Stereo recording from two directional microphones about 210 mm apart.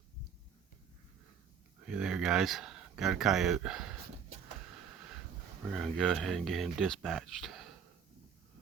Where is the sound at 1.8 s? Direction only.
5° right (ahead or behind).